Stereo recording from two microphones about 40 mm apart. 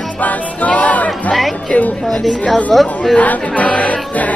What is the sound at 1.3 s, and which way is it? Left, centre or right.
Speech, centre.